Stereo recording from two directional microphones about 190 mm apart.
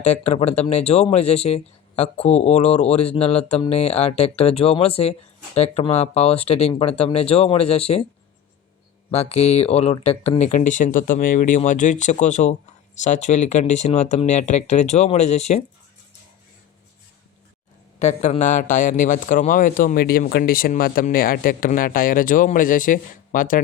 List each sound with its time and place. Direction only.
0.0 s speech: 35° left (ahead or behind)
9.0 s speech: 35° left (ahead or behind)
18.0 s a man's voice: 40° left (ahead or behind)